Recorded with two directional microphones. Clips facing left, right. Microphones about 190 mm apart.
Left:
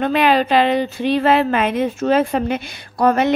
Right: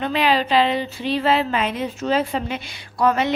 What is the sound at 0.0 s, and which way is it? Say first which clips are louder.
Speech: left 4 dB; 50° left (ahead or behind).